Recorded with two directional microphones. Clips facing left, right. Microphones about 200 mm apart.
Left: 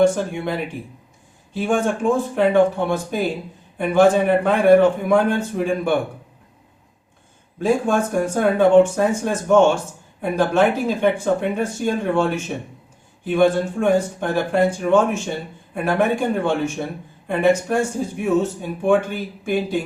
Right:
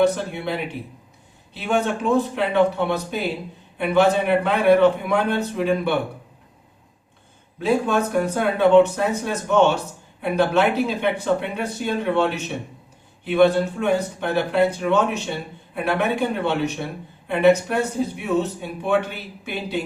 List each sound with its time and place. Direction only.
0.0 s speech: 50° left (ahead or behind)
1.5 s speech: 50° left (ahead or behind)
7.6 s speech: 50° left (ahead or behind)